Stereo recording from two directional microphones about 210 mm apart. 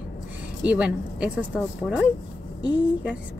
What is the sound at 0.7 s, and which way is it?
Speech, 5° right (ahead or behind).